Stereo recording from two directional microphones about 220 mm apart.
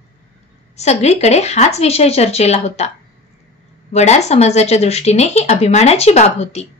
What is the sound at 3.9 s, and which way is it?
A woman's voice, 30° left (ahead or behind).